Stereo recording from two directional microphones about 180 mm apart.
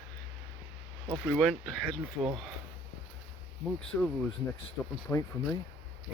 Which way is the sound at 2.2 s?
20° right (ahead or behind).